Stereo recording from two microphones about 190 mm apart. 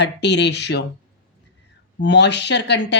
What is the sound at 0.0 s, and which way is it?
Speech, 65° left (ahead or behind).